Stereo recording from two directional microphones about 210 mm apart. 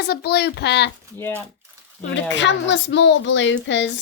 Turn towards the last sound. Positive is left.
turn(degrees=60)  # may be behind; listen again after turning